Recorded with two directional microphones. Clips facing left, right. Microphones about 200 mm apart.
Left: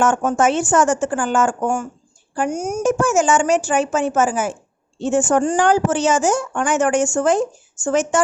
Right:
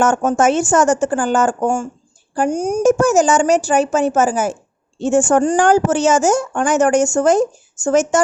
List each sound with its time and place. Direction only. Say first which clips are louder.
0.0 s a woman's voice: right 2 dB; 40° right (ahead or behind)